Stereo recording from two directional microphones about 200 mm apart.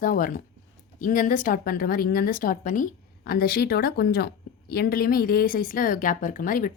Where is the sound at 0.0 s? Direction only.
45° left (ahead or behind).